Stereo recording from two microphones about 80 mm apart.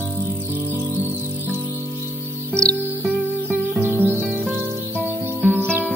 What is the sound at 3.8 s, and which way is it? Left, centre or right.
Music, right.